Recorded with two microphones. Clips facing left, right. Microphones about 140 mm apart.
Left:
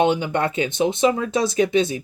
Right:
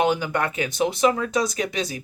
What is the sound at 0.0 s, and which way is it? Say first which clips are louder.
Speech: left 3 dB; 25° left (ahead or behind).